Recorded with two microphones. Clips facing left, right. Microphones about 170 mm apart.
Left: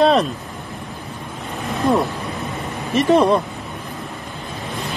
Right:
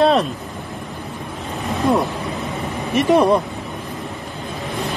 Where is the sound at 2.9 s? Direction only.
15° right (ahead or behind).